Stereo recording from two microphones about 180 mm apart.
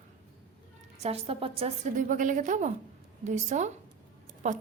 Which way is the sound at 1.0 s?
35° right (ahead or behind).